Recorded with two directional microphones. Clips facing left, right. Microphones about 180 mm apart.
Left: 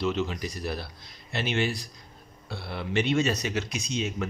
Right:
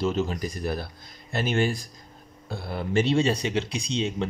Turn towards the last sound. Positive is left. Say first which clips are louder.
# right 3 dB
turn(degrees=-30)  # may be behind; listen again after turning